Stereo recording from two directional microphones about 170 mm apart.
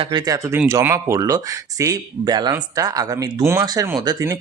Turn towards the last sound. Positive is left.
turn(degrees=-20)  # may be behind; listen again after turning